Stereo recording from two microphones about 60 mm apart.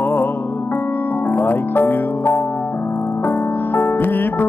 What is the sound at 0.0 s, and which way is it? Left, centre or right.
Music, left.